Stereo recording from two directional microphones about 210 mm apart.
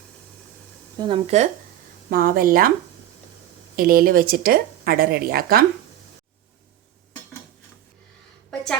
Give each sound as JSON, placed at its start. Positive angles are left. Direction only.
{"t": 0.9, "sound": "speech", "side_deg": -25}
{"t": 2.0, "sound": "a woman's voice", "side_deg": -40}
{"t": 3.8, "sound": "a woman's voice", "side_deg": -45}